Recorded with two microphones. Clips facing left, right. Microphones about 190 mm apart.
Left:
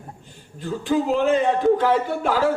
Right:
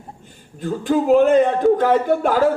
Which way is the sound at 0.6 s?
50° right (ahead or behind).